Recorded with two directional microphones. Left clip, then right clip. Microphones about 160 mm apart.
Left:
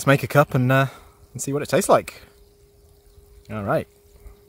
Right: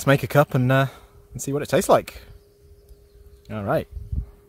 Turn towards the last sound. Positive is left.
turn(degrees=0)  # may be behind; listen again after turning